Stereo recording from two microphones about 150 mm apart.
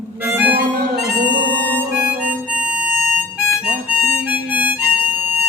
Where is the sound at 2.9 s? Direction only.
5° left (ahead or behind).